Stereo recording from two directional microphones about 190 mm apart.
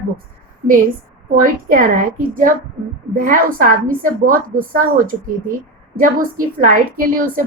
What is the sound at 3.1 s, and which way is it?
A woman's voice, 45° right (ahead or behind).